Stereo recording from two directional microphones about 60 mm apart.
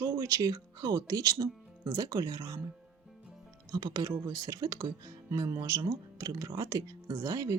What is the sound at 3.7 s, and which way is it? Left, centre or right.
Speech, right.